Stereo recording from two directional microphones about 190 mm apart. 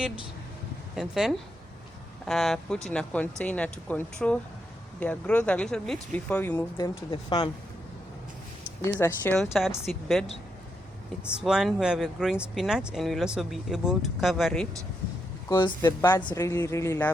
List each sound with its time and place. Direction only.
0.9 s speech: centre (ahead or behind)
6.7 s speech: 25° left (ahead or behind)
8.8 s speech: 10° left (ahead or behind)
9.5 s speech: centre (ahead or behind)
11.3 s speech: 5° right (ahead or behind)
15.4 s speech: 20° left (ahead or behind)